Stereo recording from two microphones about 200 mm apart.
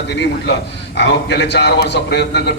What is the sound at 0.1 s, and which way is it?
A man's voice, 55° left (ahead or behind).